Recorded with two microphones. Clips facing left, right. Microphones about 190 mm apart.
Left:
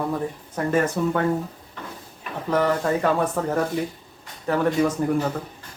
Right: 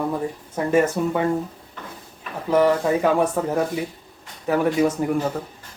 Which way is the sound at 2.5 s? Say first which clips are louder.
Right 3 dB; 10° right (ahead or behind).